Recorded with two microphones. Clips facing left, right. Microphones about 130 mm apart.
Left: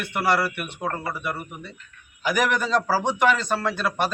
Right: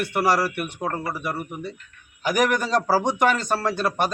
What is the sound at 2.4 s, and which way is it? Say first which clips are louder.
Speech: right 1 dB; 40° right (ahead or behind).